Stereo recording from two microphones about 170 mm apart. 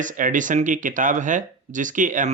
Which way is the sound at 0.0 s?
50° right (ahead or behind).